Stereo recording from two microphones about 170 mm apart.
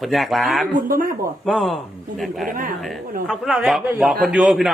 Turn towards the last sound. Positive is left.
turn(degrees=0)  # may be behind; listen again after turning